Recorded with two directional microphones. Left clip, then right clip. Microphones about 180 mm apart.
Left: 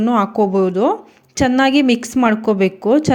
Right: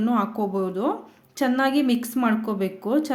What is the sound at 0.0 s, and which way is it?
A woman's voice, 35° left (ahead or behind).